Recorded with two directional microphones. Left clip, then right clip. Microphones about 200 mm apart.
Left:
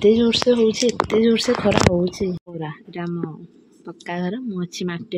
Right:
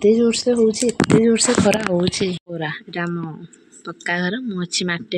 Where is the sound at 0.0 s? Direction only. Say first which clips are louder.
Right 1 dB; centre (ahead or behind).